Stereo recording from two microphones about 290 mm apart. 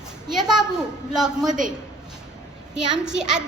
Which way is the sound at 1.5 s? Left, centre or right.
Right.